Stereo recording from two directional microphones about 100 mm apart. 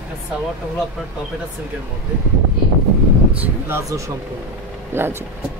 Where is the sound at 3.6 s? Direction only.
30° right (ahead or behind).